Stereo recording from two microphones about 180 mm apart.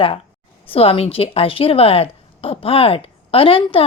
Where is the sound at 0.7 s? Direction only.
30° left (ahead or behind).